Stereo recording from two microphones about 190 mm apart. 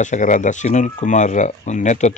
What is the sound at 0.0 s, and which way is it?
Speech, 40° left (ahead or behind).